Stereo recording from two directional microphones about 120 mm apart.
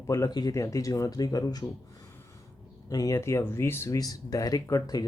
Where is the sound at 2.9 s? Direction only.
30° left (ahead or behind).